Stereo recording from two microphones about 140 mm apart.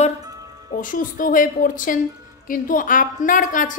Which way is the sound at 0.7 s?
75° left (ahead or behind).